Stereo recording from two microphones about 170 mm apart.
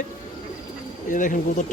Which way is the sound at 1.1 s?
50° left (ahead or behind).